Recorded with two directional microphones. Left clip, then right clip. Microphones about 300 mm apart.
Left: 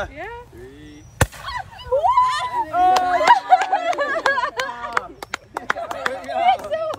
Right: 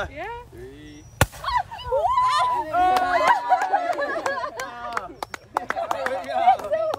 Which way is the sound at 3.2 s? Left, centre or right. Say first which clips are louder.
Left 5 dB; left.